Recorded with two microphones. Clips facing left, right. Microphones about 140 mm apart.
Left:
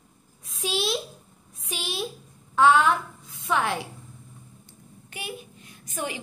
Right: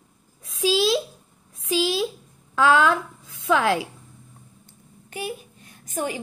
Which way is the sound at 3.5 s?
90° right.